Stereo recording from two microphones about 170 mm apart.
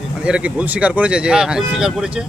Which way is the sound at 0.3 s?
5° right (ahead or behind).